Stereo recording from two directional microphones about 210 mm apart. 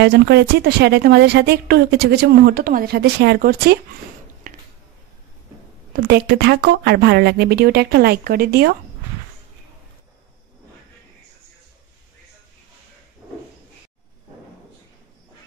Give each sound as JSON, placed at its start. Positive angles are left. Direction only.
{"t": 0.0, "sound": "speech", "side_deg": -50}
{"t": 4.4, "sound": "a sound", "side_deg": -40}
{"t": 6.0, "sound": "speech", "side_deg": -50}